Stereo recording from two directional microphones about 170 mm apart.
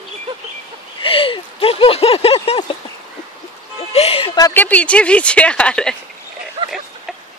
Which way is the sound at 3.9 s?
35° left (ahead or behind).